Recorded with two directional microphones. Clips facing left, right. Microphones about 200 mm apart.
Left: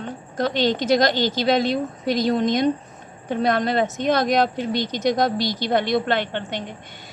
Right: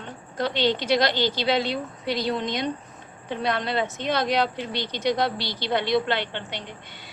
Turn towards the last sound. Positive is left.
turn(degrees=50)  # may be behind; listen again after turning